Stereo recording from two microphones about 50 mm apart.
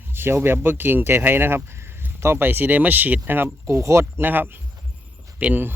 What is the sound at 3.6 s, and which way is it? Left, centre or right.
Speech, right.